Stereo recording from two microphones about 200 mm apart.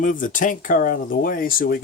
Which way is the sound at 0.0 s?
40° left (ahead or behind).